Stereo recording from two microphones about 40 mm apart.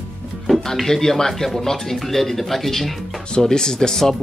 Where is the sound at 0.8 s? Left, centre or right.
Centre.